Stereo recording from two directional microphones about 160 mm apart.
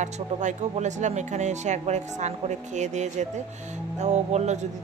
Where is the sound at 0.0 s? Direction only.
50° right (ahead or behind).